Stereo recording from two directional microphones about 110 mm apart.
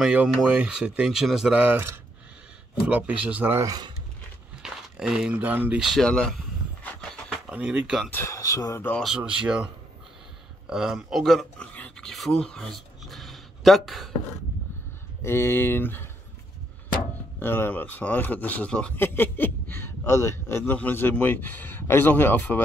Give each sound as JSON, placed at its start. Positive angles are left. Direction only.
{"t": 0.0, "sound": "speech", "side_deg": -5}
{"t": 3.5, "sound": "speech", "side_deg": -35}
{"t": 4.6, "sound": "speech", "side_deg": -5}
{"t": 5.8, "sound": "speech", "side_deg": 0}
{"t": 6.8, "sound": "vehicle", "side_deg": 10}
{"t": 7.4, "sound": "speech", "side_deg": -10}
{"t": 8.1, "sound": "speech", "side_deg": 25}
{"t": 9.0, "sound": "speech", "side_deg": -5}
{"t": 10.7, "sound": "speech", "side_deg": -5}
{"t": 11.6, "sound": "writing", "side_deg": 10}
{"t": 12.1, "sound": "a sound", "side_deg": 5}
{"t": 15.2, "sound": "speech", "side_deg": 20}
{"t": 17.4, "sound": "speech", "side_deg": 20}
{"t": 18.9, "sound": "speech", "side_deg": 20}